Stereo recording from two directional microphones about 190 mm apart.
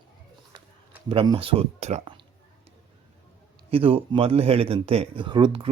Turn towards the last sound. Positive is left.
turn(degrees=-25)  # may be behind; listen again after turning